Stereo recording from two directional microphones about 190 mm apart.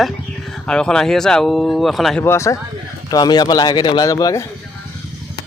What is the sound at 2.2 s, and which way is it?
Speech, 15° left (ahead or behind).